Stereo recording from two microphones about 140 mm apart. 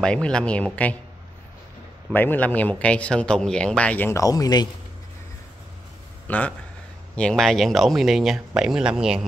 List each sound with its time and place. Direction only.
0.0 s speech: 5° left (ahead or behind)
2.0 s speech: 10° left (ahead or behind)
4.2 s speech: 25° left (ahead or behind)
6.2 s speech: 10° left (ahead or behind); by 9.2 s 5° right (ahead or behind)